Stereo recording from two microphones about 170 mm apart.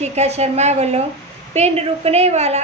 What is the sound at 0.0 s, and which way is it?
A woman's voice, 40° right (ahead or behind).